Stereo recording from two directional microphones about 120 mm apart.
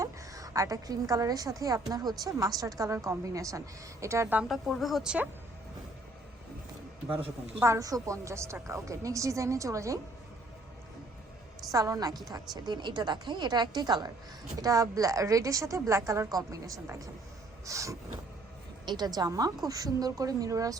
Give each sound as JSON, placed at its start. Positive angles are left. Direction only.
{"t": 0.0, "sound": "a woman's voice", "side_deg": -30}
{"t": 4.4, "sound": "a woman's voice", "side_deg": 0}
{"t": 7.6, "sound": "a woman's voice", "side_deg": -25}
{"t": 11.7, "sound": "a woman's voice", "side_deg": -30}